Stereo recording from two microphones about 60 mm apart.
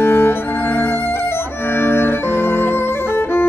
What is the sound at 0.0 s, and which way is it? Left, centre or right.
Music, left.